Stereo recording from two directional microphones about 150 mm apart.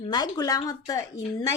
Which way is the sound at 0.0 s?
30° left (ahead or behind).